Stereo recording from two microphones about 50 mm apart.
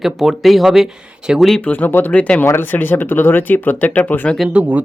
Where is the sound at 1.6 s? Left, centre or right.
Left.